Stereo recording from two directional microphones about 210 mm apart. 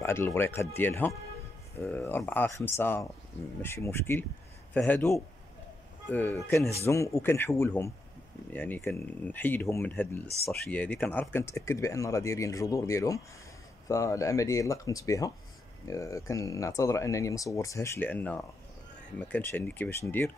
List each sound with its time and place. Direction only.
0.0 s speech: 10° left (ahead or behind)